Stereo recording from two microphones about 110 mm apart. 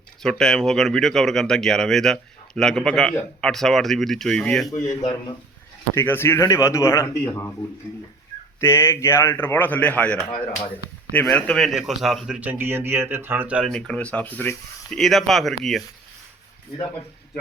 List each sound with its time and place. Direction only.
0.2 s speech: 5° left (ahead or behind)
4.9 s speech: 40° left (ahead or behind)
5.9 s speech: 20° left (ahead or behind)
8.6 s speech: 25° left (ahead or behind); by 12.4 s 5° right (ahead or behind)
12.4 s speech: 15° right (ahead or behind)
13.7 s speech: 5° left (ahead or behind)
14.8 s speech: centre (ahead or behind)